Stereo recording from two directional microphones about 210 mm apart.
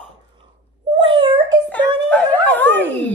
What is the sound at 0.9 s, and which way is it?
Cat, 25° right (ahead or behind).